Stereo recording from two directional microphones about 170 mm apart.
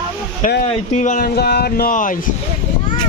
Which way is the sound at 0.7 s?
40° left (ahead or behind).